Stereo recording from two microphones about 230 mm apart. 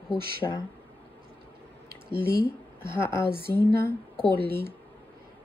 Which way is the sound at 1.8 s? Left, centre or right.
Right.